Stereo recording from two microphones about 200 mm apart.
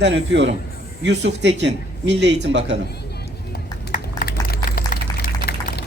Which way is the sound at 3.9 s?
45° left (ahead or behind).